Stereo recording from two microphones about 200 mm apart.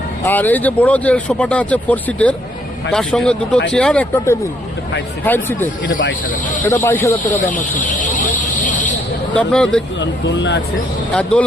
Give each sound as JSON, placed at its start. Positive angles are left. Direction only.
{"t": 0.3, "sound": "speech", "side_deg": 10}
{"t": 6.8, "sound": "speech", "side_deg": 10}
{"t": 7.2, "sound": "vehicle", "side_deg": 40}
{"t": 9.3, "sound": "speech", "side_deg": 5}
{"t": 10.0, "sound": "speech", "side_deg": 65}
{"t": 11.1, "sound": "speech", "side_deg": 5}